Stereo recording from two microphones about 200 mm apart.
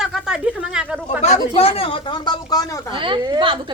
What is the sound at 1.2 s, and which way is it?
Speech, 30° left (ahead or behind).